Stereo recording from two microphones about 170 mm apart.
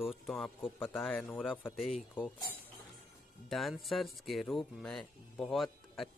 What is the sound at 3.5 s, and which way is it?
Speech, centre (ahead or behind).